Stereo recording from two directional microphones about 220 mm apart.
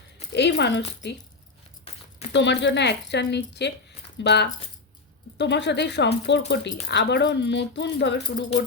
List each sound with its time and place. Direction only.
0.3 s speech: 50° left (ahead or behind)
2.3 s speech: 50° left (ahead or behind)